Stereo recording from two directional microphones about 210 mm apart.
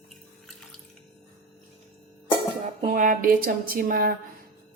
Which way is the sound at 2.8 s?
35° right (ahead or behind).